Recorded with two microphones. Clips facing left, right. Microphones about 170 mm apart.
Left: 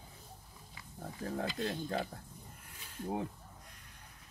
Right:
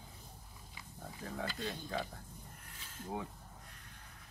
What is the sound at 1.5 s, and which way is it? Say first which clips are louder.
Speech: left 4 dB; 60° left (ahead or behind).